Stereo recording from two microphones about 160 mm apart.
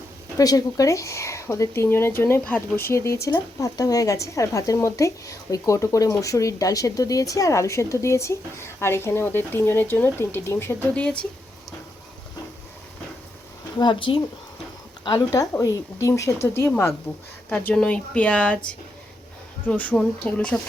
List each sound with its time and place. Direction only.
0.3 s speech: 20° left (ahead or behind)
13.7 s a woman's voice: 30° left (ahead or behind)
15.0 s speech: 20° left (ahead or behind)
19.6 s speech: 10° left (ahead or behind)